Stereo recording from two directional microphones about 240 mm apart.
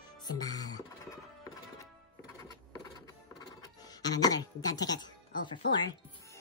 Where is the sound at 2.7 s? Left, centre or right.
Centre.